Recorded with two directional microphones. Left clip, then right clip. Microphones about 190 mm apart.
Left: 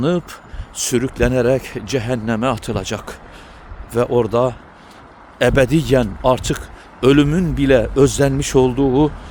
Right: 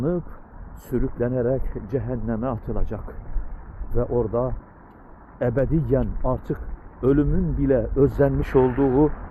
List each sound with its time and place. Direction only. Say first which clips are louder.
0.9 s speech: left 7 dB; 40° left (ahead or behind)
3.9 s speech: left 8 dB; 60° left (ahead or behind)
4.2 s speech: left 8 dB; 40° left (ahead or behind)